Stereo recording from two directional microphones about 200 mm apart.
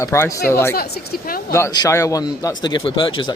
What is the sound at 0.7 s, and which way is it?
Speech, 50° left (ahead or behind).